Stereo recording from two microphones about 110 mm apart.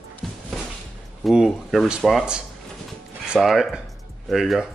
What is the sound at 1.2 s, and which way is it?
Speech, centre (ahead or behind).